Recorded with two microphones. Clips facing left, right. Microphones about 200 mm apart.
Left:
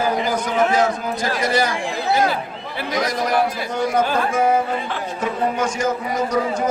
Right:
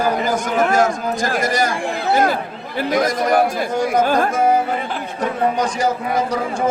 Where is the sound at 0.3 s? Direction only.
45° right (ahead or behind).